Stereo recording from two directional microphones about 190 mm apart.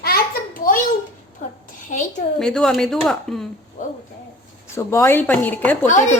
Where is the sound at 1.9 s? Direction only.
40° left (ahead or behind).